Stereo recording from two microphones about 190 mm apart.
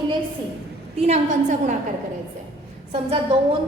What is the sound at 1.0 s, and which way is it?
Speech, 35° right (ahead or behind).